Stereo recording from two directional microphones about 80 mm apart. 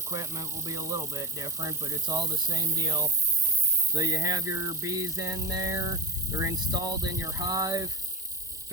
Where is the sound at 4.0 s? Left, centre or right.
Right.